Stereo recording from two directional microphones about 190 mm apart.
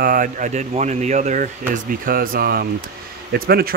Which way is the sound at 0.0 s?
45° right (ahead or behind).